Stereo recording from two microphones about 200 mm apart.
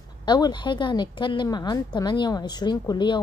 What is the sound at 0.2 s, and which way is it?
A woman's voice, 20° left (ahead or behind).